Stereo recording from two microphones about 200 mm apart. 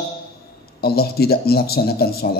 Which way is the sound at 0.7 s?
50° left (ahead or behind).